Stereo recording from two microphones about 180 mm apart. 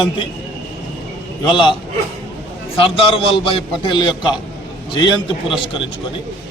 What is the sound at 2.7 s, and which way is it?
A man's voice, 30° left (ahead or behind).